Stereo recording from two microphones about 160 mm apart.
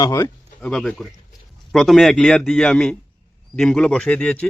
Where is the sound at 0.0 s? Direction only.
20° left (ahead or behind).